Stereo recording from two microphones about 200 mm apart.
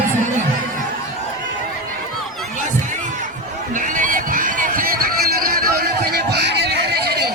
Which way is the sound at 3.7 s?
40° right (ahead or behind).